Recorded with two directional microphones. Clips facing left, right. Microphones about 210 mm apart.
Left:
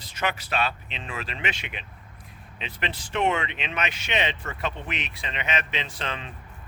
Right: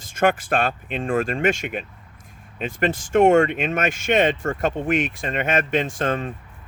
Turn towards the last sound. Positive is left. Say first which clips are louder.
# right 11 dB
turn(degrees=-45)  # may be behind; listen again after turning